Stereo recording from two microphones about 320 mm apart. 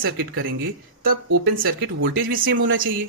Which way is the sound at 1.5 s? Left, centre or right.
Right.